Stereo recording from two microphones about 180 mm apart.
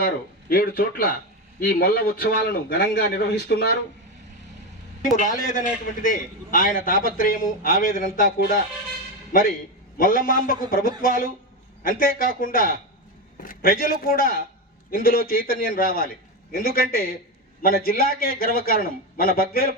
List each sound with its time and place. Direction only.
0.0 s a man's voice: 55° left (ahead or behind)
5.2 s a man's voice: 45° left (ahead or behind)